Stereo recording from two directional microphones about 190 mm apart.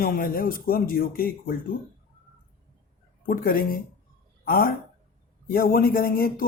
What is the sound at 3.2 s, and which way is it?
Speech, 50° left (ahead or behind).